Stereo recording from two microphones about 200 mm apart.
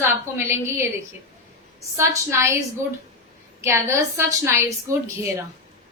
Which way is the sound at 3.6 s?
15° right (ahead or behind).